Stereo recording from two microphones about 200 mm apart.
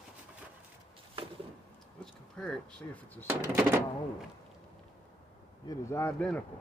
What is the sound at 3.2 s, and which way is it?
Speech, 10° right (ahead or behind).